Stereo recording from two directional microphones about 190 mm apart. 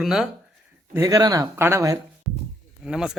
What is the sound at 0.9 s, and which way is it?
Speech, 15° right (ahead or behind).